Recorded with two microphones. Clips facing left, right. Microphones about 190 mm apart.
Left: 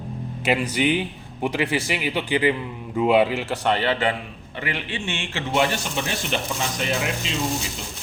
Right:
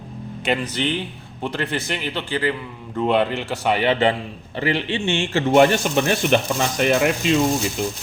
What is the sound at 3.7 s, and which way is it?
Speech, 15° right (ahead or behind).